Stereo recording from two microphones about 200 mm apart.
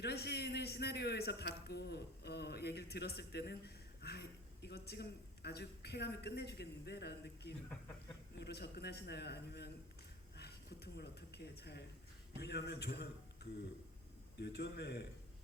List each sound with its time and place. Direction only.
0.0 s a man's voice: 55° left (ahead or behind)